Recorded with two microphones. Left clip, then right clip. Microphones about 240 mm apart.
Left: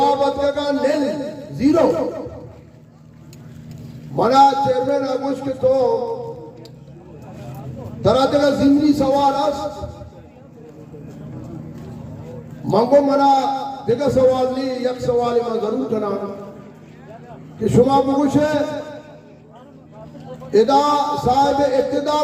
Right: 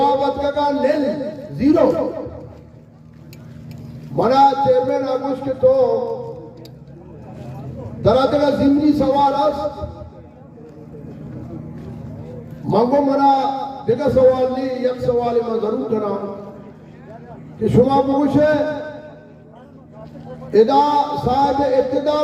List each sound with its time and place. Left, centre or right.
0.0 s a sound: left
4.2 s a man's voice: left
8.0 s a man's voice: left
12.6 s a man's voice: left
17.7 s a man's voice: left
20.5 s a man's voice: left